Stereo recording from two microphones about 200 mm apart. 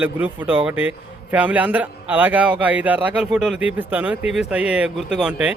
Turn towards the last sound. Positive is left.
turn(degrees=-5)  # may be behind; listen again after turning